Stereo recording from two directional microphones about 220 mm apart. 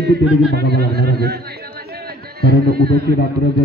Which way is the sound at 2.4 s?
45° right (ahead or behind).